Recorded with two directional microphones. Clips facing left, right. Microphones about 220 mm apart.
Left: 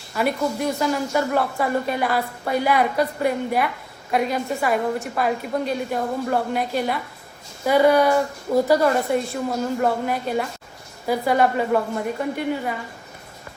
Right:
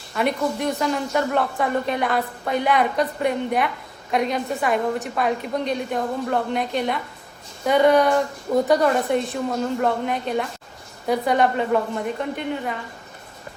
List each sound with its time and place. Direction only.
0.1 s speech: 5° left (ahead or behind)